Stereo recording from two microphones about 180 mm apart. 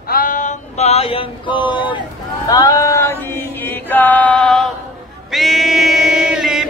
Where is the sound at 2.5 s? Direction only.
20° left (ahead or behind).